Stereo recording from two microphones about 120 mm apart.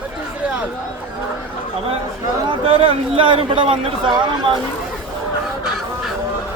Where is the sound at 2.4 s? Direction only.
50° right (ahead or behind).